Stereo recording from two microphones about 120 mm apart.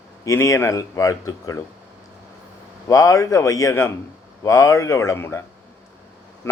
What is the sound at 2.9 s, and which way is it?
A man's voice, 30° left (ahead or behind).